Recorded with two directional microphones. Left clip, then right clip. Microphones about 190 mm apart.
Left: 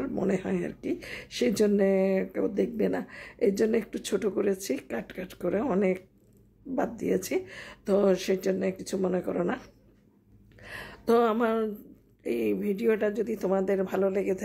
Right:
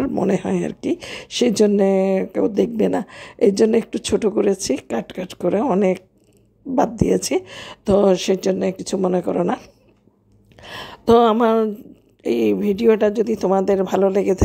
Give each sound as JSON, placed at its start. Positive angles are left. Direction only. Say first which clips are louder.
{"t": 0.1, "sound": "speech", "louder": "right 9 dB", "side_deg": -30}